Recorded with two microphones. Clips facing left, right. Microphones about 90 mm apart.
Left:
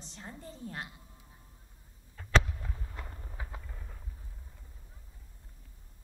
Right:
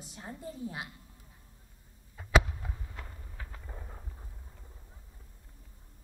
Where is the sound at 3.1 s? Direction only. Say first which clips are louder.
Left 3 dB; 20° left (ahead or behind).